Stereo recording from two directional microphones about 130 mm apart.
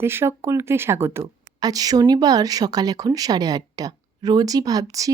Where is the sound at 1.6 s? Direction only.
30° right (ahead or behind).